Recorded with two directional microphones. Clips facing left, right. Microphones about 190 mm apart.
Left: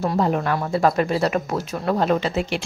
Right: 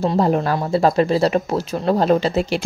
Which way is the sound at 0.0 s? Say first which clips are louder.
Right 3 dB; 30° right (ahead or behind).